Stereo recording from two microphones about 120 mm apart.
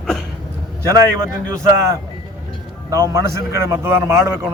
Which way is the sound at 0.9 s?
25° right (ahead or behind).